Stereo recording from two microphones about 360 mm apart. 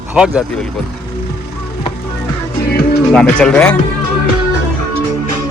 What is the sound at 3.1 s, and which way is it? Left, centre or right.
Speech, centre.